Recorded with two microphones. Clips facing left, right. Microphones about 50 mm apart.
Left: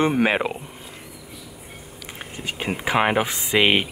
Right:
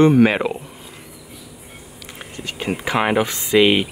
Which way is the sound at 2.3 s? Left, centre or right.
Centre.